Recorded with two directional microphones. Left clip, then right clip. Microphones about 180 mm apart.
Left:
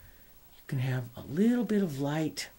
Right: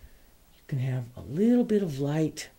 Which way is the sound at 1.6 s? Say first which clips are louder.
Right 5 dB; 70° right (ahead or behind).